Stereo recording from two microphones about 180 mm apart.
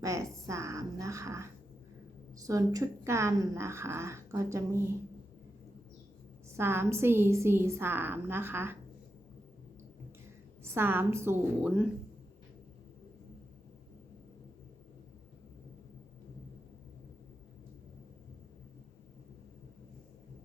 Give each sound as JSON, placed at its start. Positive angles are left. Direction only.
{"t": 0.0, "sound": "a sound", "side_deg": -15}
{"t": 2.4, "sound": "a woman's voice", "side_deg": -20}
{"t": 6.6, "sound": "a woman's voice", "side_deg": -15}
{"t": 10.8, "sound": "a woman's voice", "side_deg": -15}